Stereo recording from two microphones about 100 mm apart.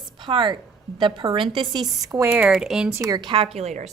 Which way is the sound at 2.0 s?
35° right (ahead or behind).